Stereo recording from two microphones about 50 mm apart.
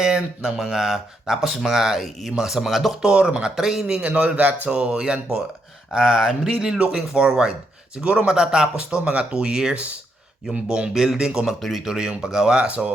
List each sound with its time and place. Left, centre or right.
0.0 s speech: centre
3.0 s speech: centre
3.5 s speech: centre
3.9 s speech: right; by 11.9 s centre
11.9 s speech: centre
12.6 s speech: right